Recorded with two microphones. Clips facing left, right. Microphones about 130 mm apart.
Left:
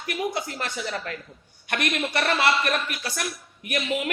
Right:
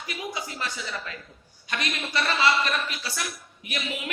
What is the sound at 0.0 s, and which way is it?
Speech, 60° left (ahead or behind).